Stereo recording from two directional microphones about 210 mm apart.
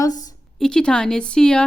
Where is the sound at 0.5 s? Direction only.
5° left (ahead or behind).